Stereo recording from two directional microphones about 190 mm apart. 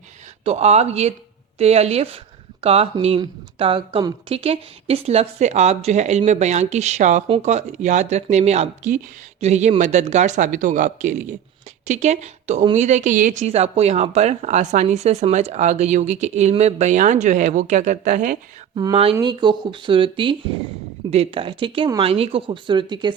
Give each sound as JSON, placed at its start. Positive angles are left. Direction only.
{"t": 0.4, "sound": "a woman's voice", "side_deg": -35}
{"t": 18.7, "sound": "speech", "side_deg": -20}